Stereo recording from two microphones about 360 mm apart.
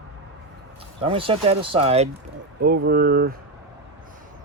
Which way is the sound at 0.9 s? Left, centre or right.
Centre.